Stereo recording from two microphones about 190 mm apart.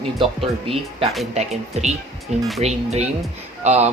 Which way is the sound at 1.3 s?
35° right (ahead or behind).